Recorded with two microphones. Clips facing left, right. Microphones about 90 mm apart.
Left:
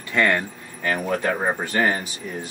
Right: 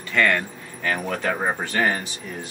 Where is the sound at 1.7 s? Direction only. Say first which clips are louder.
Left 1 dB; 15° left (ahead or behind).